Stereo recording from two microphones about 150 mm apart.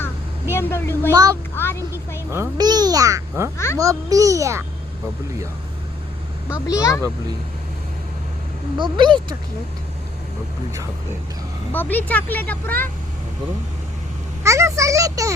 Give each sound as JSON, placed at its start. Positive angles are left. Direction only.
{"t": 0.0, "sound": "a sound", "side_deg": 15}
{"t": 1.1, "sound": "a child's voice", "side_deg": -25}
{"t": 1.5, "sound": "a sound", "side_deg": 15}
{"t": 2.3, "sound": "a child's voice", "side_deg": -20}
{"t": 6.7, "sound": "speech", "side_deg": 20}
{"t": 8.8, "sound": "speech", "side_deg": -30}
{"t": 11.7, "sound": "speech", "side_deg": 10}
{"t": 14.4, "sound": "a child's voice", "side_deg": -20}